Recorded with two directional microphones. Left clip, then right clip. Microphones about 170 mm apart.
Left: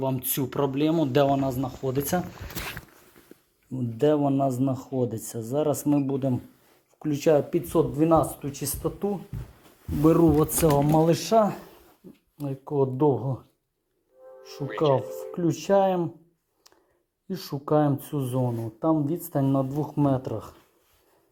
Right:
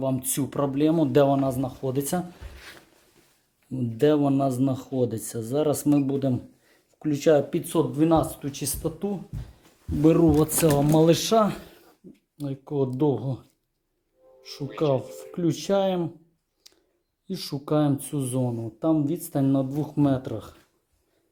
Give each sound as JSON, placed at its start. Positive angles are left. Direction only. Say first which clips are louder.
{"t": 0.0, "sound": "speech", "louder": "right 1 dB", "side_deg": -15}
{"t": 3.7, "sound": "speech", "louder": "right 1 dB", "side_deg": -25}
{"t": 7.0, "sound": "speech", "louder": "right 1 dB", "side_deg": -5}
{"t": 12.4, "sound": "speech", "louder": "left 2 dB", "side_deg": -5}
{"t": 14.4, "sound": "speech", "louder": "left 2 dB", "side_deg": -5}
{"t": 16.7, "sound": "a sound", "louder": "right 3 dB", "side_deg": -5}
{"t": 17.2, "sound": "speech", "louder": "left 1 dB", "side_deg": -10}